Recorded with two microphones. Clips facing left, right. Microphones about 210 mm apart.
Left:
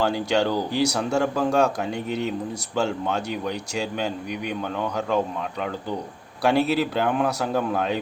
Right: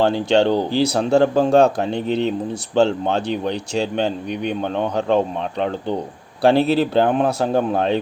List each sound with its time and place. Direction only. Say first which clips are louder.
0.0 s a man's voice: right 6 dB; 25° right (ahead or behind)